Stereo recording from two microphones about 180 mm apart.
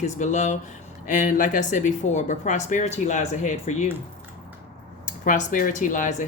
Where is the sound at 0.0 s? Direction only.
40° left (ahead or behind).